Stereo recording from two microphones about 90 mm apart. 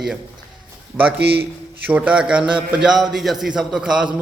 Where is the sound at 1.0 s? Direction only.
15° right (ahead or behind).